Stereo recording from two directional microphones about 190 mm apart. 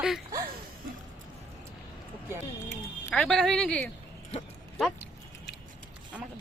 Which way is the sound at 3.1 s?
5° left (ahead or behind).